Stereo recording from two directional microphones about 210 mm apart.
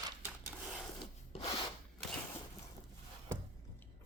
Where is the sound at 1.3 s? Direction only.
30° left (ahead or behind).